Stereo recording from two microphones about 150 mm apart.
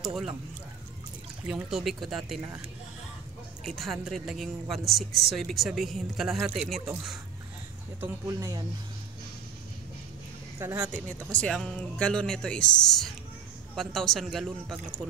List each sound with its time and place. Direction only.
0.0 s speech: 5° right (ahead or behind)
1.5 s a woman's voice: 5° right (ahead or behind)
3.6 s a woman's voice: centre (ahead or behind)
8.3 s speech: 25° right (ahead or behind)
10.6 s speech: 15° right (ahead or behind)
11.1 s a woman's voice: 5° left (ahead or behind)